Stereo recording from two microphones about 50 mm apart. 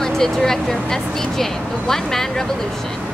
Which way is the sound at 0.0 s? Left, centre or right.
Centre.